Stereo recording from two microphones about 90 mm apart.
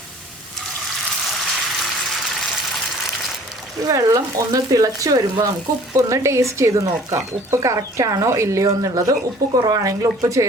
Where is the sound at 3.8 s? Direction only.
40° right (ahead or behind).